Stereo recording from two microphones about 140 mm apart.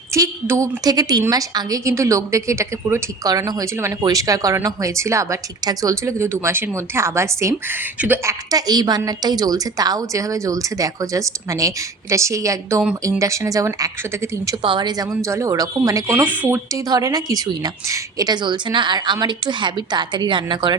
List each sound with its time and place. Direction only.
0.1 s a woman's voice: 20° right (ahead or behind)
16.9 s a woman's voice: 25° right (ahead or behind)